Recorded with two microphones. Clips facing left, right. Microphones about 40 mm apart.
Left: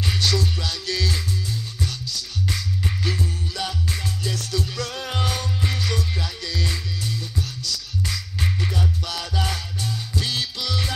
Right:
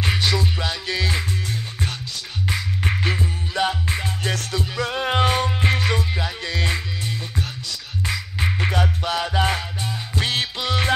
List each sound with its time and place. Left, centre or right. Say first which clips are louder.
0.0 s music: right 2 dB; right
1.5 s music: right 1 dB; right
2.8 s music: right 4 dB; right
3.1 s music: right 2 dB; right
4.2 s music: right 3 dB; right
4.6 s music: right 4 dB; right
8.5 s music: right 7 dB; right
9.0 s music: right 6 dB; right
10.2 s music: right 6 dB; right